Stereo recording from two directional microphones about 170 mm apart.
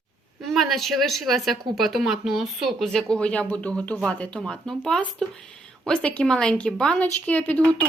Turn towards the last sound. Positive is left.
turn(degrees=10)  # may be behind; listen again after turning